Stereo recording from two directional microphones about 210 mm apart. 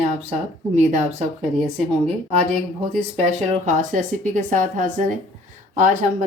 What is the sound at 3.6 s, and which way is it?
Speech, 35° right (ahead or behind).